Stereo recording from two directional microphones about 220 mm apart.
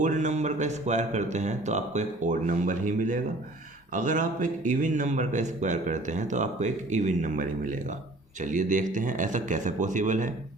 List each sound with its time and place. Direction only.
0.0 s a man's voice: 35° right (ahead or behind)